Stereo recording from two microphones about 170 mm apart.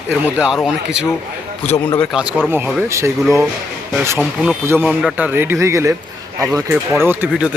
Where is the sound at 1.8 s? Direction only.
10° left (ahead or behind).